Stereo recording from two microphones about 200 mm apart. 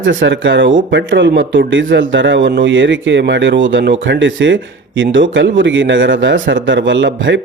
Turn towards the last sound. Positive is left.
turn(degrees=-65)  # may be behind; listen again after turning